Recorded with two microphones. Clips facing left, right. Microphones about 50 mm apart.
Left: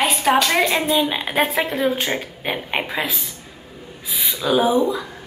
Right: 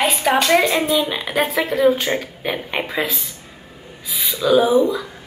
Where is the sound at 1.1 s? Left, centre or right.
Left.